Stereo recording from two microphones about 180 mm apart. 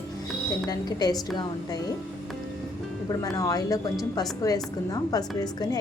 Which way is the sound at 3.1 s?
20° left (ahead or behind).